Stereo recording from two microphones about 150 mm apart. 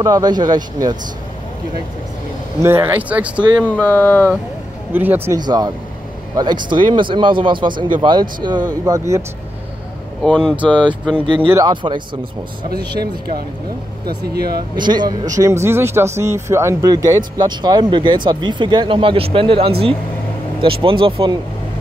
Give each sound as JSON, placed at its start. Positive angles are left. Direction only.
{"t": 0.0, "sound": "speech", "side_deg": -25}
{"t": 2.6, "sound": "speech", "side_deg": -15}
{"t": 3.6, "sound": "speech", "side_deg": 10}
{"t": 4.9, "sound": "speech", "side_deg": -15}
{"t": 5.4, "sound": "speech", "side_deg": -25}
{"t": 10.2, "sound": "speech", "side_deg": 5}
{"t": 11.1, "sound": "speech", "side_deg": -35}
{"t": 12.6, "sound": "speech", "side_deg": -90}
{"t": 14.0, "sound": "speech", "side_deg": -90}
{"t": 14.8, "sound": "speech", "side_deg": -30}